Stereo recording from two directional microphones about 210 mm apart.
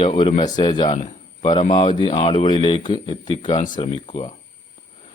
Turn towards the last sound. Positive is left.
turn(degrees=25)  # may be behind; listen again after turning